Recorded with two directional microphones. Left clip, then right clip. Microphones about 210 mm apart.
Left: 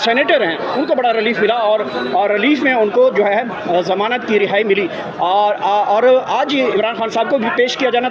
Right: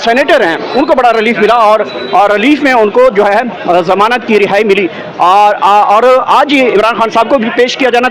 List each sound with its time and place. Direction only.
0.0 s a man's voice: 10° right (ahead or behind)